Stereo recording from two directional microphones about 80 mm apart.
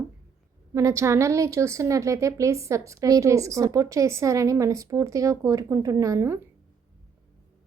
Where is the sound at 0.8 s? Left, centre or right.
Right.